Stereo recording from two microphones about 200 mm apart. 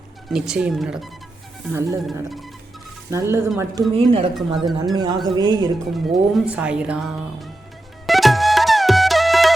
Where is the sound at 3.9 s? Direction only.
30° right (ahead or behind).